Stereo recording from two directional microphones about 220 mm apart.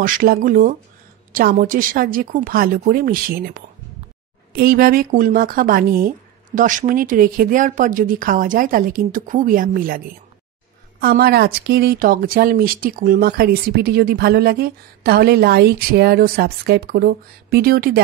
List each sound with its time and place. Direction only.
0.0 s speech: 40° right (ahead or behind)